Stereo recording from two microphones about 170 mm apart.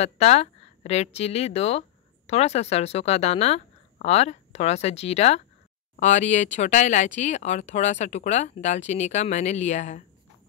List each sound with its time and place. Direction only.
0.0 s speech: 40° left (ahead or behind)